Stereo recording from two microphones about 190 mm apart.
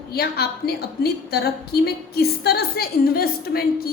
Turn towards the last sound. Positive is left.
turn(degrees=55)  # may be behind; listen again after turning